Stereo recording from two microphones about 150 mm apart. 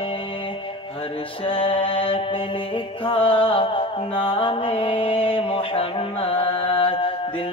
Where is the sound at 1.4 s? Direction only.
35° left (ahead or behind).